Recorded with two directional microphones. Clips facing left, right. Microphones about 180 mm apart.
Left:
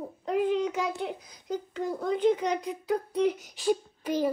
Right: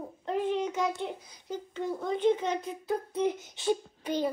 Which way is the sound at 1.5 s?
35° left (ahead or behind).